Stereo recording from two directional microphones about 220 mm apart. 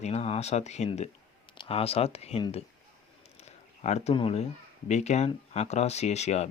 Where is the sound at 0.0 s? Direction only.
30° left (ahead or behind).